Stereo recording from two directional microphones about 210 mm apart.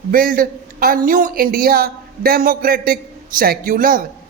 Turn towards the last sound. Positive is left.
turn(degrees=-40)  # may be behind; listen again after turning